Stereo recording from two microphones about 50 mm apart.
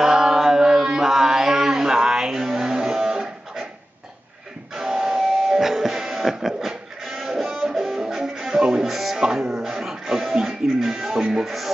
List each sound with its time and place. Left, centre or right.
0.0 s mantra: centre
4.7 s music: centre
11.1 s music: centre
11.4 s music: centre